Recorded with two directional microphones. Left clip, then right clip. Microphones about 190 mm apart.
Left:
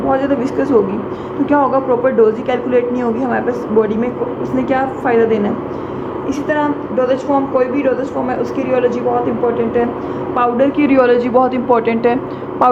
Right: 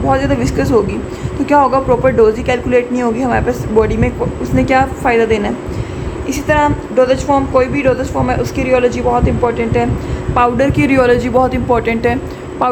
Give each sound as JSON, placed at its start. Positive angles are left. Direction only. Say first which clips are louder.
{"t": 0.1, "sound": "a woman's voice", "louder": "right 2 dB", "side_deg": -30}
{"t": 10.3, "sound": "a woman's voice", "louder": "right 2 dB", "side_deg": -35}